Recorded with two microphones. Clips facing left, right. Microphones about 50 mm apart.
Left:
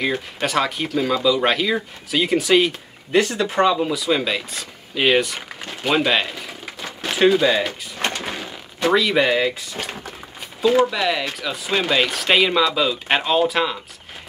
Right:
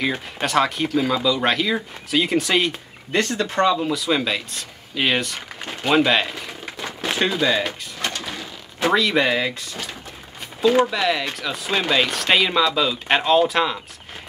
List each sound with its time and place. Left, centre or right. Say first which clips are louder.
0.0 s speech: left 1 dB; centre
8.0 s sliding door: left 3 dB; left
8.7 s speech: left 1 dB; centre
10.9 s speech: even; centre